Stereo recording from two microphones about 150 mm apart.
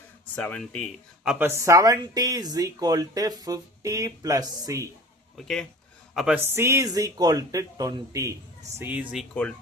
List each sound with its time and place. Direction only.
0.3 s speech: 10° left (ahead or behind)
1.2 s speech: 5° right (ahead or behind)
1.5 s speech: 20° right (ahead or behind)
5.4 s speech: 5° left (ahead or behind)
6.4 s speech: 15° right (ahead or behind)
8.8 s speech: 10° right (ahead or behind)